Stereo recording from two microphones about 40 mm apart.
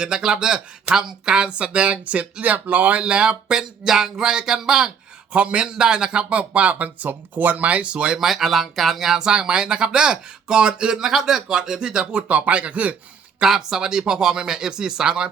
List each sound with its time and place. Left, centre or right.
0.0 s speech: centre
1.3 s speech: right
3.0 s speech: right
5.3 s speech: right
5.6 s speech: centre; by 7.1 s right
7.1 s speech: right
8.2 s speech: centre
9.1 s speech: centre
10.9 s speech: centre
12.1 s speech: right
13.4 s speech: centre